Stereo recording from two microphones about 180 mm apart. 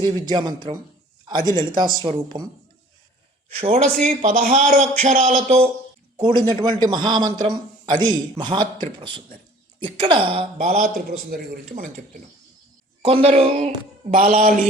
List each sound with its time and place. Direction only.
0.0 s a man's voice: 25° right (ahead or behind)
1.2 s a sound: 25° right (ahead or behind)
1.7 s a man's voice: 25° right (ahead or behind)
3.5 s speech: 35° right (ahead or behind)
6.5 s a man's voice: 25° right (ahead or behind)
10.6 s speech: 50° right (ahead or behind)
13.0 s speech: 30° right (ahead or behind)
14.1 s speech: 50° right (ahead or behind)